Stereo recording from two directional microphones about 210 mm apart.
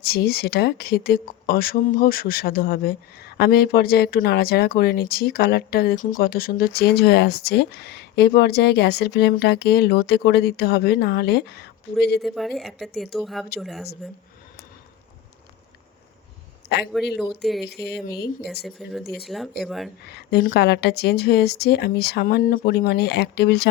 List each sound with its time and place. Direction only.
0.0 s speech: 50° left (ahead or behind)
12.2 s a woman's voice: centre (ahead or behind)
16.6 s a man's voice: 55° left (ahead or behind)
17.4 s a woman's voice: centre (ahead or behind)
17.7 s speech: 50° left (ahead or behind)
18.4 s a woman's voice: centre (ahead or behind)
20.1 s speech: 50° left (ahead or behind)